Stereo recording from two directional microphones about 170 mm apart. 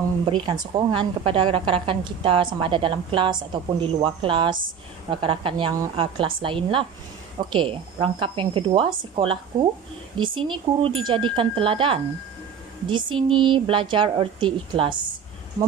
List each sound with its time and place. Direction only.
0.2 s a woman's voice: 25° right (ahead or behind)